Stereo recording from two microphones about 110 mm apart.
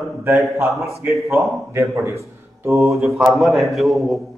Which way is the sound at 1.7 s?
25° right (ahead or behind).